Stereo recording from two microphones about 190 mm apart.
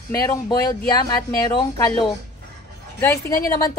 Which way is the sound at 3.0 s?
15° left (ahead or behind).